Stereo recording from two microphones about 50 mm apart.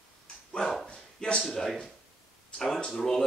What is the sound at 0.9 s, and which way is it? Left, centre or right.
Speech, centre.